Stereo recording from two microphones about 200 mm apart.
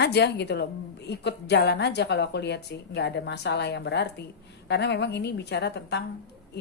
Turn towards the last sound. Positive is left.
turn(degrees=55)  # may be behind; listen again after turning